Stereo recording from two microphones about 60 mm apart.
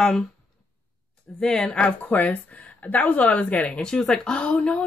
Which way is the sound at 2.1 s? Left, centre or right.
Left.